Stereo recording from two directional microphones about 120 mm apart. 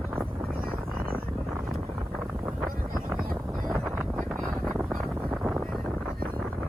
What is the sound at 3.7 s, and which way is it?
Wind noise, 25° right (ahead or behind).